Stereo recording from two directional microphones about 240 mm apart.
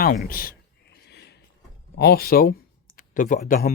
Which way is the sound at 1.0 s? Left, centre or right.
Left.